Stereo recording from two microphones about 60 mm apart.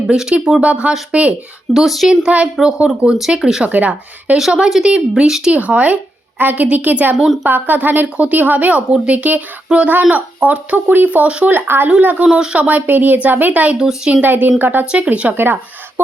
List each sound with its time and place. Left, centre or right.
0.1 s speech: centre
1.7 s speech: centre
2.2 s speech: centre
3.7 s speech: right
4.4 s speech: centre
11.5 s speech: right
11.9 s speech: right
12.5 s speech: right
13.7 s speech: centre
14.1 s speech: right
15.0 s speech: right
15.3 s speech: right